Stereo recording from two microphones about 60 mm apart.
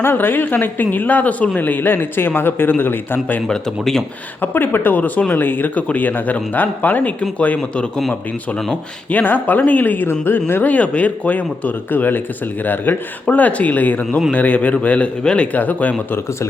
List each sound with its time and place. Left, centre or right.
0.0 s speech: left
3.4 s speech: centre
4.4 s speech: left
8.7 s speech: left
15.5 s speech: left